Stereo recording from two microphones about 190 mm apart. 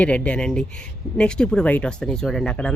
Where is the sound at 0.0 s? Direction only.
5° left (ahead or behind).